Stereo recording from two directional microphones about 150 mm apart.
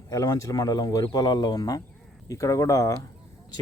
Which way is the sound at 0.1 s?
20° left (ahead or behind).